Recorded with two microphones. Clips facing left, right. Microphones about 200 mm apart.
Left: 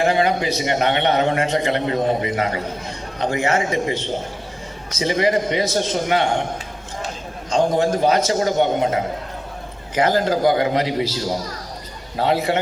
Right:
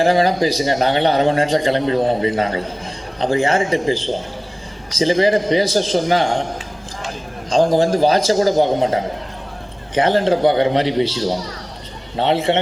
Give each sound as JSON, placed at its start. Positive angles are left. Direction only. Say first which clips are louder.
{"t": 0.0, "sound": "a man's voice", "louder": "right 3 dB", "side_deg": -35}
{"t": 7.5, "sound": "a man's voice", "louder": "right 3 dB", "side_deg": -35}